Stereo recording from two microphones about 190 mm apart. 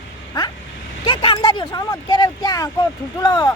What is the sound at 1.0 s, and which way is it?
Speech, 25° left (ahead or behind).